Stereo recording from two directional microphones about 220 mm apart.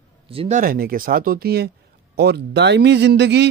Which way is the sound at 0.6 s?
40° right (ahead or behind).